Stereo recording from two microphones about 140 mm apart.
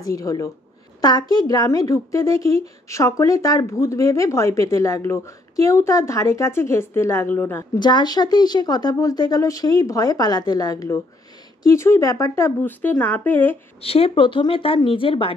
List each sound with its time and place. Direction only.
0.0 s speech: 25° left (ahead or behind)
7.8 s speech: 30° left (ahead or behind); by 13.6 s 15° left (ahead or behind)
13.7 s a woman's voice: 45° left (ahead or behind)